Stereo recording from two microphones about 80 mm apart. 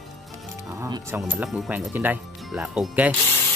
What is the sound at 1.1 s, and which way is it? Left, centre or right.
Speech, right.